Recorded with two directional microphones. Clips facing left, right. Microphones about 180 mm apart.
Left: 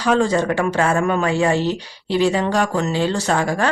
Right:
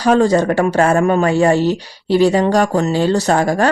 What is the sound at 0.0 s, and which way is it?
Speech, 40° right (ahead or behind).